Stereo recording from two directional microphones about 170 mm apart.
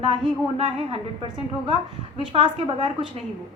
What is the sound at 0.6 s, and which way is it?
Speech, 30° right (ahead or behind).